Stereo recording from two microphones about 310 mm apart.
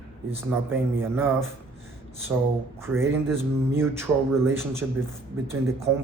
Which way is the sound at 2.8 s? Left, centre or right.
Centre.